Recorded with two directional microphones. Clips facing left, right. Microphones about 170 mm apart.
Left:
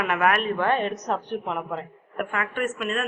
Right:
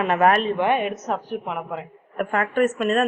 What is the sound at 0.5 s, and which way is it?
A woman's voice, 15° right (ahead or behind).